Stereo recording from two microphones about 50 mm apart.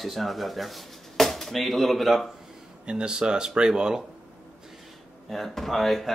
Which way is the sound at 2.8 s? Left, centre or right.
Centre.